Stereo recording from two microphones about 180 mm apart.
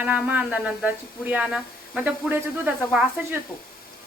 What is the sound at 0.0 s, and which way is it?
Speech, 10° right (ahead or behind).